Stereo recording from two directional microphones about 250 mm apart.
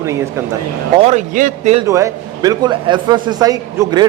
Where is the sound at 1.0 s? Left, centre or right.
Right.